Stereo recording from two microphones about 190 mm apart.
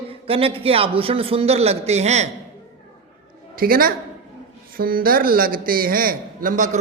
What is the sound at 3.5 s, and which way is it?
A woman's voice, 50° right (ahead or behind).